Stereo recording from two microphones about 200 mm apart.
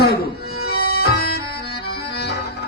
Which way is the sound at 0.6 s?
50° left (ahead or behind).